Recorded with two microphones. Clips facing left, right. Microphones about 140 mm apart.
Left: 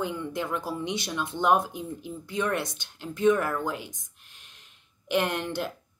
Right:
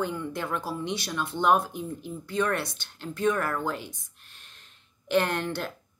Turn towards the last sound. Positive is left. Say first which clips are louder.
# even
turn(degrees=15)  # may be behind; listen again after turning